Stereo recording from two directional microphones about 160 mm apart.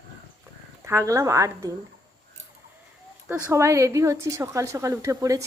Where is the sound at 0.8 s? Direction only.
20° right (ahead or behind).